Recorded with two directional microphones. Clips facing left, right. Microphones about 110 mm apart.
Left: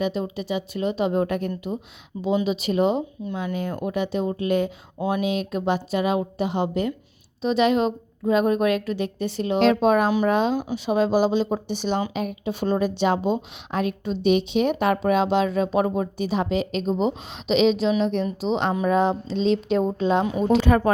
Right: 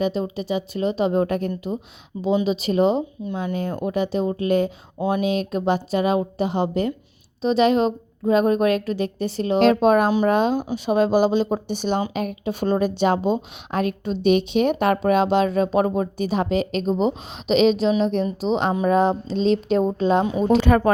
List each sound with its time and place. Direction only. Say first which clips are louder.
0.0 s a woman's voice: right 2 dB; 35° right (ahead or behind)
20.6 s speech: right 2 dB; 60° right (ahead or behind)